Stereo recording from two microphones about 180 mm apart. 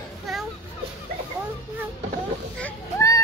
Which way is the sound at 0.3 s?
Centre (ahead or behind).